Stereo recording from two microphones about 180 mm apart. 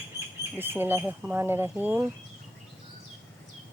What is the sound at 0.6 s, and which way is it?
Speech, 10° right (ahead or behind).